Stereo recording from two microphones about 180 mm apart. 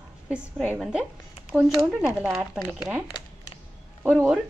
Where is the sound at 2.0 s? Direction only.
10° right (ahead or behind).